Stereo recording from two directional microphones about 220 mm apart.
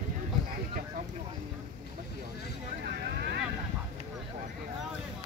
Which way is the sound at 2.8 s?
45° right (ahead or behind).